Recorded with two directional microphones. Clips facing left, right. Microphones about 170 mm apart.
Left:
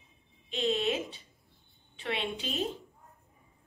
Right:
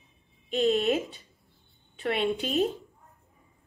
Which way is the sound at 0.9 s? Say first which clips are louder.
Right 5 dB; 40° right (ahead or behind).